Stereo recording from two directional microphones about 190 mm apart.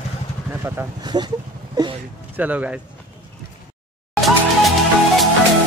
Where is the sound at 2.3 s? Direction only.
10° right (ahead or behind).